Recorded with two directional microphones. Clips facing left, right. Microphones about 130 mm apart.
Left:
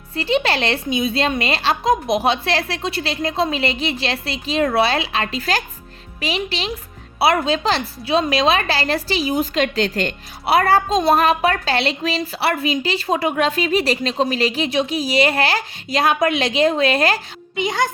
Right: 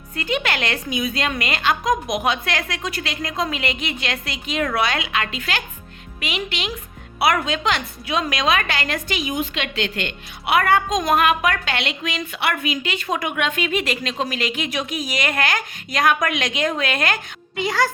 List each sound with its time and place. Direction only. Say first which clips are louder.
0.2 s a woman's voice: left 5 dB; 30° left (ahead or behind)
17.6 s a child's voice: left 1 dB; 20° left (ahead or behind)